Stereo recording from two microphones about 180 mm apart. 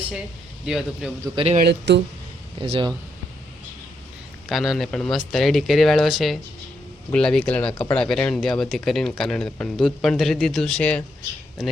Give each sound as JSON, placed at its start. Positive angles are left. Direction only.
{"t": 0.6, "sound": "speech", "side_deg": 0}
{"t": 1.2, "sound": "speech", "side_deg": -30}
{"t": 1.5, "sound": "speech", "side_deg": -65}
{"t": 2.6, "sound": "speech", "side_deg": -30}
{"t": 4.4, "sound": "speech", "side_deg": 0}